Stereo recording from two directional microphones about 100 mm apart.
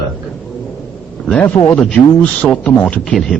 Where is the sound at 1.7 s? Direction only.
5° left (ahead or behind).